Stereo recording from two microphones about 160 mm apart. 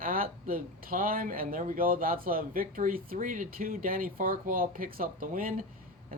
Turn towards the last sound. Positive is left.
turn(degrees=-60)  # may be behind; listen again after turning